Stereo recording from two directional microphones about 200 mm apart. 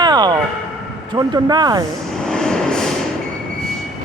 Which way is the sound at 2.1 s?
Centre (ahead or behind).